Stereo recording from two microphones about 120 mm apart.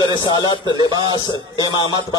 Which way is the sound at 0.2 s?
40° left (ahead or behind).